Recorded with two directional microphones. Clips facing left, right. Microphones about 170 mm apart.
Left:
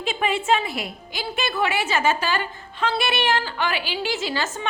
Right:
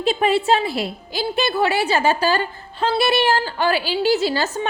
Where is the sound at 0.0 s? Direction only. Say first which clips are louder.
Right 6 dB; 35° right (ahead or behind).